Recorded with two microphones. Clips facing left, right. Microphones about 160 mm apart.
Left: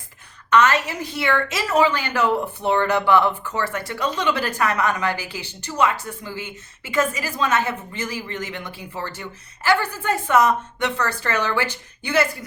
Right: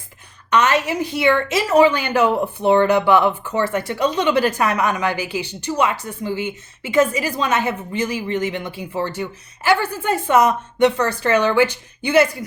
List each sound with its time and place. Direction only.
0.5 s a woman's voice: 15° right (ahead or behind)